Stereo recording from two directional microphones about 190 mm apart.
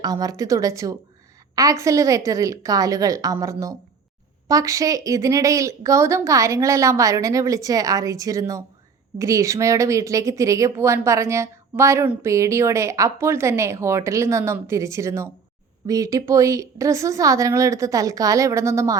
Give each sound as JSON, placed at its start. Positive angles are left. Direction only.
{"t": 0.0, "sound": "a woman's voice", "side_deg": -20}